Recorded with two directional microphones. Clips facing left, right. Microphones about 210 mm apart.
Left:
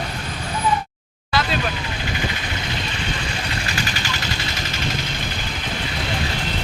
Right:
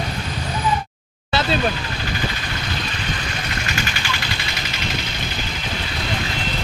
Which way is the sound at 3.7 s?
35° left (ahead or behind).